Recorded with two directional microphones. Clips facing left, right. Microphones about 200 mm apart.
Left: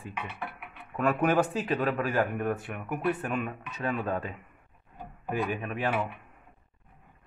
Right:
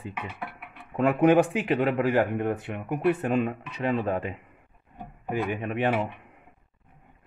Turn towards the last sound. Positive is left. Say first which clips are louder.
# right 4 dB
turn(degrees=-25)  # may be behind; listen again after turning